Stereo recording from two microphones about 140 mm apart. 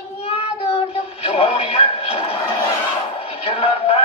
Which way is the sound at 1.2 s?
45° left (ahead or behind).